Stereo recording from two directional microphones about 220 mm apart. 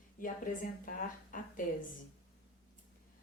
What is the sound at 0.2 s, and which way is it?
Speech, 40° left (ahead or behind).